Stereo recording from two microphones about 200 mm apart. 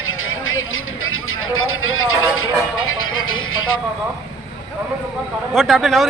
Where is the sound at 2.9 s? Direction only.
90° left.